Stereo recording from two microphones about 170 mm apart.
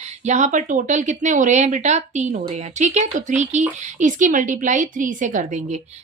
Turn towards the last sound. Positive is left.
turn(degrees=-45)  # may be behind; listen again after turning